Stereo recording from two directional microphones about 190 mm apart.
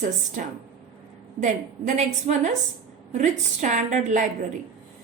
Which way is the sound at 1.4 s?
40° right (ahead or behind).